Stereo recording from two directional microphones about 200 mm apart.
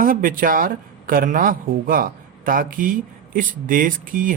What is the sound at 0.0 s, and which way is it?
Speech, 45° right (ahead or behind).